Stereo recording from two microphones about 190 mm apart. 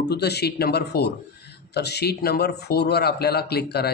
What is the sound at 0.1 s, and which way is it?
Speech, 60° left (ahead or behind).